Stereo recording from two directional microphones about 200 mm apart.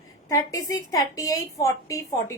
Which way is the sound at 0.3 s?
15° left (ahead or behind).